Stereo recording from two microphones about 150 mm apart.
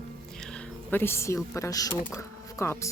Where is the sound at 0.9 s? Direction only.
15° left (ahead or behind).